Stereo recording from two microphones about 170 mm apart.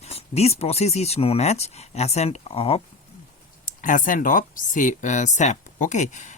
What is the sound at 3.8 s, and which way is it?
A man's voice, 50° left (ahead or behind).